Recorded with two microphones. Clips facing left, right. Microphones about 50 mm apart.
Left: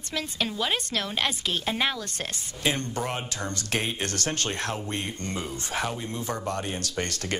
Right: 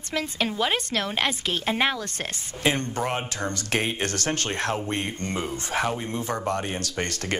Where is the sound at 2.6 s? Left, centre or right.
Right.